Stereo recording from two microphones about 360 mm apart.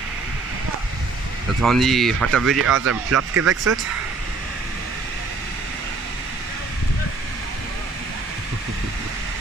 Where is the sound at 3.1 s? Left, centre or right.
Right.